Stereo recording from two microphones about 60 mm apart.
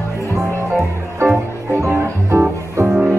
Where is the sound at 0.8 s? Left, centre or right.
Right.